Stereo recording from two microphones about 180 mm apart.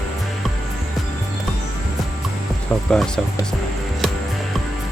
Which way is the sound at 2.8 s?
5° left (ahead or behind).